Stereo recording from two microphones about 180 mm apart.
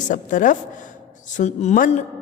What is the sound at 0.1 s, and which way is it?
Speech, 45° left (ahead or behind).